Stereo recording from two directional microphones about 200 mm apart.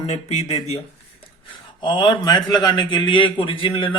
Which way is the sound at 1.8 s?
20° left (ahead or behind).